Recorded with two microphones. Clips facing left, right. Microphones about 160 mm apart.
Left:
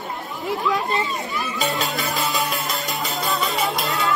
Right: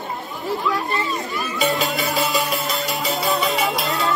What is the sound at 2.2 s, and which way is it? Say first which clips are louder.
Music: right 3 dB; centre (ahead or behind).